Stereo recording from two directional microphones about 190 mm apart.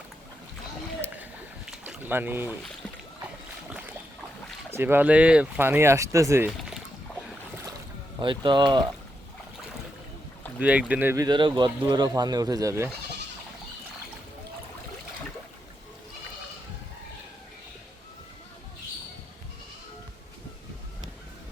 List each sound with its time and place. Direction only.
1.0 s a sound: 5° right (ahead or behind)
3.7 s boat: 5° right (ahead or behind)
4.7 s speech: 10° right (ahead or behind)
6.6 s pour: centre (ahead or behind)
8.2 s speech: 25° right (ahead or behind)
10.6 s speech: 5° right (ahead or behind)